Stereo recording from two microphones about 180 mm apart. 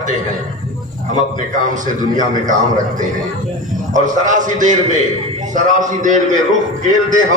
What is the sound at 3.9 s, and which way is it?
Speech, 45° right (ahead or behind).